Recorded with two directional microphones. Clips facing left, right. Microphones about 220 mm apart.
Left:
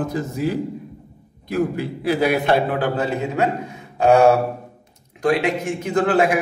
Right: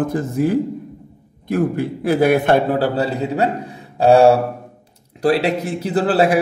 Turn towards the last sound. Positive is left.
turn(degrees=-35)  # may be behind; listen again after turning